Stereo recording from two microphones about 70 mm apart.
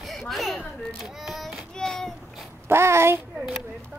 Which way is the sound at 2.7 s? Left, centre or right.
Right.